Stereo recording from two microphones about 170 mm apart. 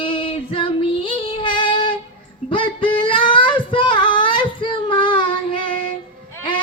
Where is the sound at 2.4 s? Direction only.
30° left (ahead or behind).